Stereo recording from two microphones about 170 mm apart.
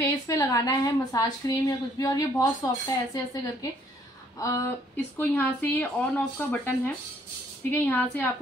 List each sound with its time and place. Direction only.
0.0 s a woman's voice: 20° left (ahead or behind)
4.4 s speech: 15° left (ahead or behind)
7.7 s speech: 10° left (ahead or behind)